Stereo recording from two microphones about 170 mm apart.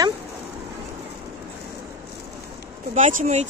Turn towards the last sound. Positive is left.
turn(degrees=-45)  # may be behind; listen again after turning